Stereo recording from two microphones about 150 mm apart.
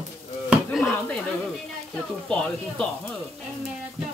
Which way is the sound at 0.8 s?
15° left (ahead or behind).